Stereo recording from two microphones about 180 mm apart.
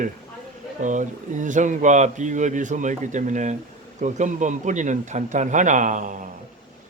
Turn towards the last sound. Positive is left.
turn(degrees=-45)  # may be behind; listen again after turning